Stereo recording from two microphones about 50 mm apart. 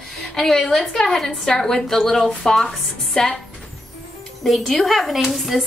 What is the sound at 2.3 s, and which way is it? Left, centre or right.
Speech, centre.